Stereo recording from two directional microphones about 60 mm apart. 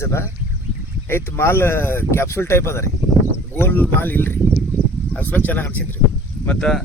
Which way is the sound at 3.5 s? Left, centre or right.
Left.